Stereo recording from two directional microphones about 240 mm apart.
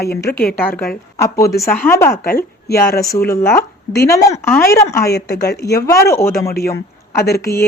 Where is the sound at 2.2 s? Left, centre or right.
Left.